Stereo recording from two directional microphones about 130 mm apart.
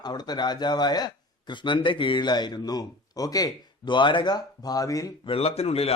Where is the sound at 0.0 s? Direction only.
30° left (ahead or behind).